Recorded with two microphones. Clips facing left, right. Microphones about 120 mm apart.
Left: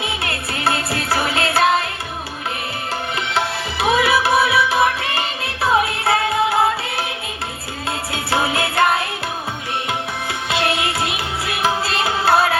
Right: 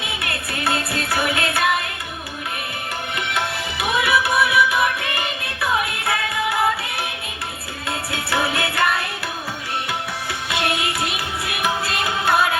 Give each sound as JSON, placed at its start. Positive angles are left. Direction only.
{"t": 0.0, "sound": "music", "side_deg": 25}
{"t": 3.3, "sound": "music", "side_deg": 30}
{"t": 7.9, "sound": "music", "side_deg": 25}
{"t": 10.5, "sound": "music", "side_deg": 25}